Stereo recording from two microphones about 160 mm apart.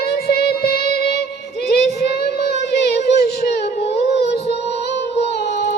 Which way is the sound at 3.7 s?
40° left (ahead or behind).